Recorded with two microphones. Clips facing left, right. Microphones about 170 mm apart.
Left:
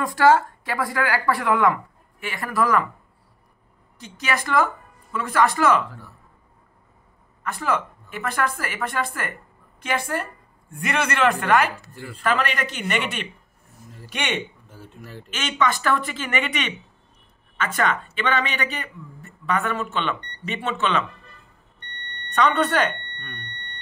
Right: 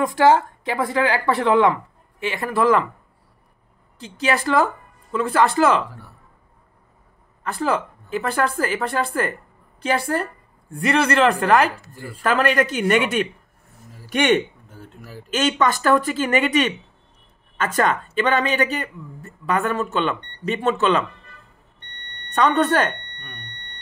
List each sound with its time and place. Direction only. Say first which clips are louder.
0.0 s a woman's voice: right 1 dB; 20° right (ahead or behind)
4.0 s speech: right 5 dB; 30° right (ahead or behind)
7.4 s speech: right 3 dB; 30° right (ahead or behind)
14.0 s a sound: right 10 dB; 45° right (ahead or behind)
15.2 s speech: right 4 dB; 40° right (ahead or behind)
22.4 s speech: right 2 dB; 45° right (ahead or behind)
23.1 s a sound: left 2 dB; 15° right (ahead or behind)